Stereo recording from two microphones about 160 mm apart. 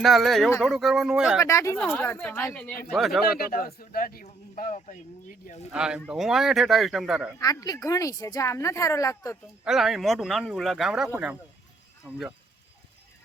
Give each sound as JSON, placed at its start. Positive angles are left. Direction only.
{"t": 0.0, "sound": "speech", "side_deg": 0}
{"t": 1.4, "sound": "a woman's voice", "side_deg": 20}
{"t": 1.8, "sound": "a woman's voice", "side_deg": 5}
{"t": 3.2, "sound": "speech", "side_deg": 70}
{"t": 5.7, "sound": "speech", "side_deg": -5}
{"t": 7.3, "sound": "speech", "side_deg": 20}
{"t": 9.6, "sound": "speech", "side_deg": 0}